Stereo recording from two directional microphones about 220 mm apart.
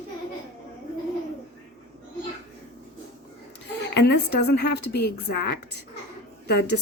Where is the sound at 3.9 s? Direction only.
50° left (ahead or behind).